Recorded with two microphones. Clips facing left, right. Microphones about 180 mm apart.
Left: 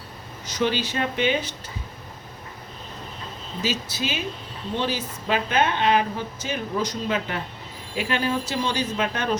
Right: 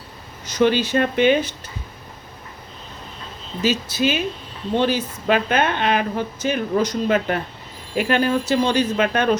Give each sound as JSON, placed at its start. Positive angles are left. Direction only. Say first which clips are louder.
{"t": 0.6, "sound": "a woman's voice", "louder": "right 7 dB", "side_deg": -55}
{"t": 3.6, "sound": "a woman's voice", "louder": "right 7 dB", "side_deg": -55}